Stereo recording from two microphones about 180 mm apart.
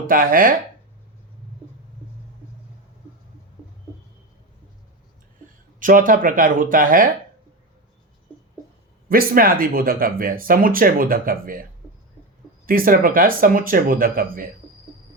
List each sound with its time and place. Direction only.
0.1 s speech: 50° right (ahead or behind)
5.8 s speech: 50° right (ahead or behind)
9.0 s speech: 55° right (ahead or behind)
12.6 s speech: 50° right (ahead or behind)